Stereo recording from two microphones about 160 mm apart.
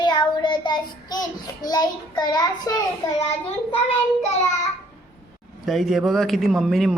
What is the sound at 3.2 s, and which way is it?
Child singing, 40° left (ahead or behind).